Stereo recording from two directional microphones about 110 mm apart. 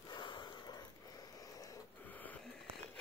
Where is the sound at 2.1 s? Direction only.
15° left (ahead or behind).